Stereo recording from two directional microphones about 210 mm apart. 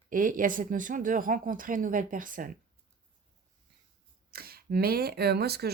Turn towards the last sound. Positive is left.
turn(degrees=-50)  # may be behind; listen again after turning